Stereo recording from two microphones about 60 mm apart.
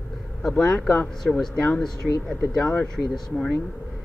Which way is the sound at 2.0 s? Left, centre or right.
Centre.